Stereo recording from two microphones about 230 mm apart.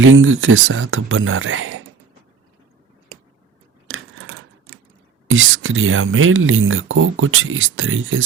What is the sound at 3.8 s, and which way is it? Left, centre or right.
Scissors, right.